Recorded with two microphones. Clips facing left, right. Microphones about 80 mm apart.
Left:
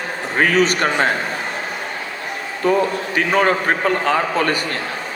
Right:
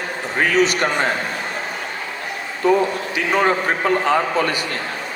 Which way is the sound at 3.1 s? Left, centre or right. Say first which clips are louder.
Left 2 dB; left.